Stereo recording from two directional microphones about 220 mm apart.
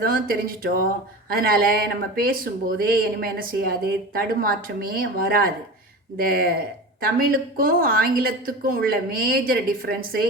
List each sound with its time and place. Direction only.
0.0 s speech: 40° right (ahead or behind)